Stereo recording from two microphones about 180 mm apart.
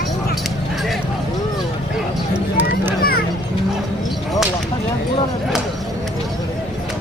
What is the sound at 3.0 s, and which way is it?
Children playing, 55° left (ahead or behind).